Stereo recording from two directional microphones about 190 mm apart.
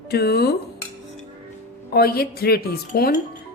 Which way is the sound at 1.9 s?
55° left (ahead or behind).